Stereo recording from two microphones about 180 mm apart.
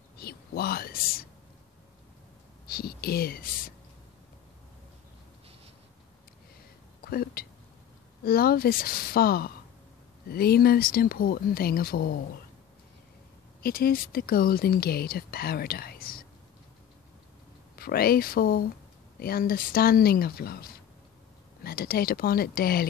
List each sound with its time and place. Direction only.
0.2 s speech: 60° left (ahead or behind)
2.7 s speech: 60° left (ahead or behind)
7.1 s a sound: 60° left (ahead or behind)
8.2 s speech: 55° left (ahead or behind)
13.6 s speech: 55° left (ahead or behind)
17.7 s speech: 55° left (ahead or behind)